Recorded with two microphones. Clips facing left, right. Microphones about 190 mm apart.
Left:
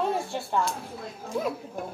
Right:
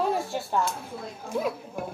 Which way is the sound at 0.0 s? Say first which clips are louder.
Right 1 dB; centre (ahead or behind).